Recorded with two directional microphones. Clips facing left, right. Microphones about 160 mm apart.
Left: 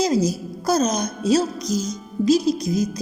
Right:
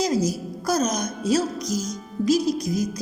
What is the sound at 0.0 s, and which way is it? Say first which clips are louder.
A woman's voice: left 3 dB; 25° left (ahead or behind).